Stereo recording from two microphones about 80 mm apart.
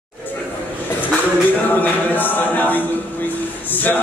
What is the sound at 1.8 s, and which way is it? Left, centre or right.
A capella, left.